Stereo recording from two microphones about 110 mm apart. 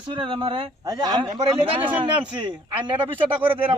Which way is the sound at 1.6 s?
55° right (ahead or behind).